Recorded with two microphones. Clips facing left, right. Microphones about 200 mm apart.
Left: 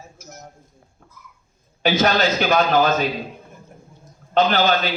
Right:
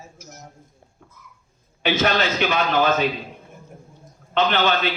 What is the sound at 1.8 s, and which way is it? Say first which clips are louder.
Speech: left 3 dB; 40° left (ahead or behind).